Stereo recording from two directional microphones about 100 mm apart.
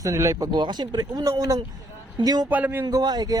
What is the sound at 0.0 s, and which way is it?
Speech, 30° right (ahead or behind).